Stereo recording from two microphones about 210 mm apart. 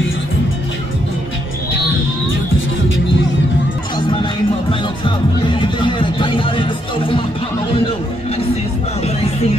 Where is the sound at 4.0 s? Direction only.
20° left (ahead or behind).